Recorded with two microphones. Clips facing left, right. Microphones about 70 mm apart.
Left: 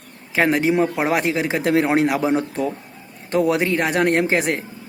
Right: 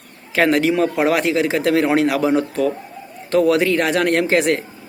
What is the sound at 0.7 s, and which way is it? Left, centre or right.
Speech, left.